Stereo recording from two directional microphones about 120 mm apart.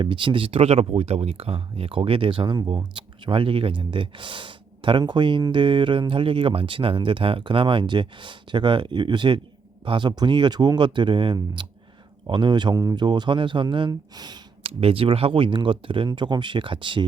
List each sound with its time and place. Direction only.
0.0 s speech: 45° right (ahead or behind)
14.6 s speech: 55° right (ahead or behind)